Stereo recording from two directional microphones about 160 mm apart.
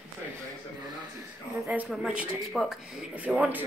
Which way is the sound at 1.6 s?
5° right (ahead or behind).